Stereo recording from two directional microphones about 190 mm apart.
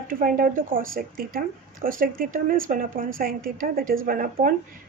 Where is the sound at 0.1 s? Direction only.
45° right (ahead or behind).